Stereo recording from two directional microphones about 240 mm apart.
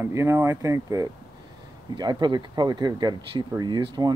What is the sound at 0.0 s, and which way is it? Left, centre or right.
Speech, centre.